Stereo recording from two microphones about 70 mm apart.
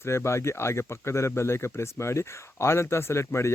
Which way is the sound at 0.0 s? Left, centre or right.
Left.